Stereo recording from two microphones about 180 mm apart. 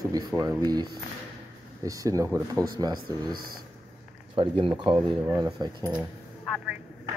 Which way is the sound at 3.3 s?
55° right (ahead or behind).